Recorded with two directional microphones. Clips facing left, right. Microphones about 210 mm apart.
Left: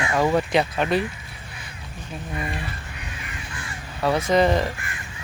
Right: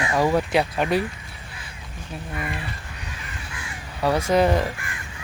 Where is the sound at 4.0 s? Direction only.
10° right (ahead or behind).